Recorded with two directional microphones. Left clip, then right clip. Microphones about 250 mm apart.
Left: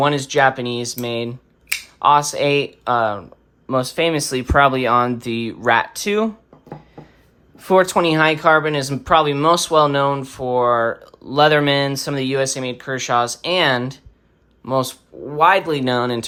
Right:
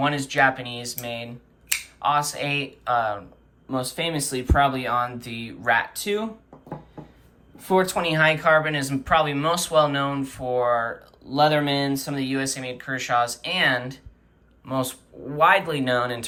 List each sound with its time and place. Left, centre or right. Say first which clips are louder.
0.0 s speech: left 5 dB; centre
7.5 s speech: left 7 dB; left